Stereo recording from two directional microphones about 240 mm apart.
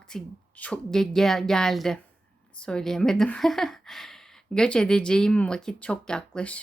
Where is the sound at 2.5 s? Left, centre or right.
Centre.